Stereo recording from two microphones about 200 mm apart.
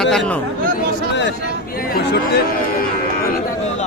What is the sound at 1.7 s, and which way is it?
Speech, 45° left (ahead or behind).